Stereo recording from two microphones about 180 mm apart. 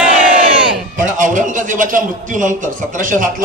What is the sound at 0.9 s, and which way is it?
A man's voice, 45° right (ahead or behind).